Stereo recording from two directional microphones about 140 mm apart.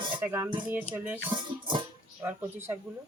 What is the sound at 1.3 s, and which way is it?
Music, 35° right (ahead or behind).